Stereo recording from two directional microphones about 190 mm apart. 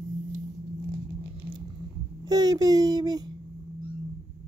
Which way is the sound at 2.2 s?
20° right (ahead or behind).